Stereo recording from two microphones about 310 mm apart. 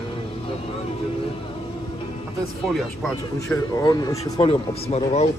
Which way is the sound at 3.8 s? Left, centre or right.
Centre.